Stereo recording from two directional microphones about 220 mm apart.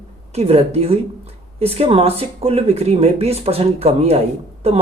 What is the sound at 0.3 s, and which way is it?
Speech, 30° right (ahead or behind).